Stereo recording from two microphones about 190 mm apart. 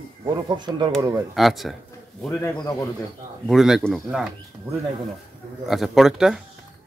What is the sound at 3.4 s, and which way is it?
Speech, centre (ahead or behind).